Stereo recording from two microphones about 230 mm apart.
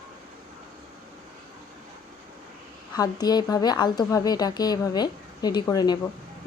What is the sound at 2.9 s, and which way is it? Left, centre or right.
A woman's voice, centre.